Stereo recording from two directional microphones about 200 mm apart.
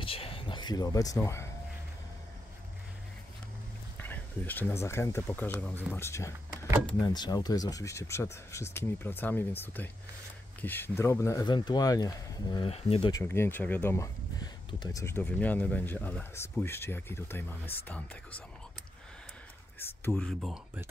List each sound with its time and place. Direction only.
0.0 s a sound: 25° left (ahead or behind)
4.0 s speech: 10° left (ahead or behind); by 13.1 s 30° left (ahead or behind)
13.1 s speech: 10° left (ahead or behind)
19.8 s speech: 5° left (ahead or behind)